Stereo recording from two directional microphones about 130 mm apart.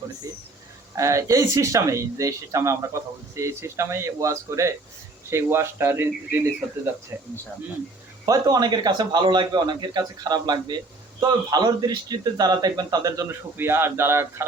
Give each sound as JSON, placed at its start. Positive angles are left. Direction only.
{"t": 0.3, "sound": "a sound", "side_deg": -25}
{"t": 0.9, "sound": "speech", "side_deg": -25}
{"t": 8.2, "sound": "a man's voice", "side_deg": -25}